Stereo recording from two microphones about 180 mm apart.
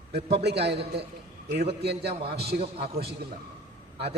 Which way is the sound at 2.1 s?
35° right (ahead or behind).